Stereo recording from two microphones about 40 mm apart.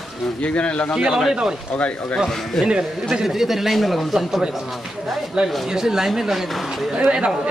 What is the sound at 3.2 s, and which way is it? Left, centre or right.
Speech, centre.